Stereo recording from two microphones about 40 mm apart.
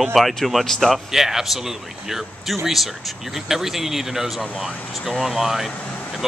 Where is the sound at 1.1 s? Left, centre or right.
Centre.